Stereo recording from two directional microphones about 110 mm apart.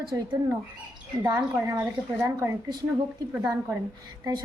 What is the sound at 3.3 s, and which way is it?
Humming, 10° right (ahead or behind).